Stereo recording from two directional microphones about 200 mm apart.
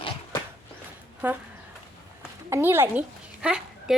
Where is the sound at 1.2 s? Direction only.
10° right (ahead or behind).